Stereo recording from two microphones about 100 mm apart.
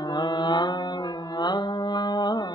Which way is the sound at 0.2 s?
45° left (ahead or behind).